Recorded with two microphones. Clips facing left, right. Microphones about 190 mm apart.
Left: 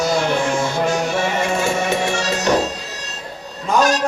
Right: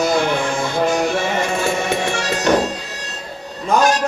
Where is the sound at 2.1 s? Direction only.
55° right (ahead or behind).